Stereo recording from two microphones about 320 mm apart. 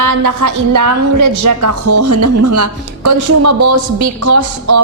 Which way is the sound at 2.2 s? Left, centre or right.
Right.